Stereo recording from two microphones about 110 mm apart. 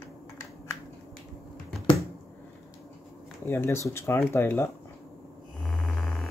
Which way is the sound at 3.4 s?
25° left (ahead or behind).